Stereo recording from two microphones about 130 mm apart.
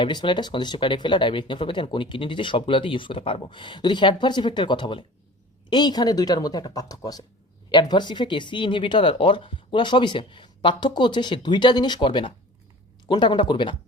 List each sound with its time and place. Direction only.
0.0 s speech: 35° left (ahead or behind)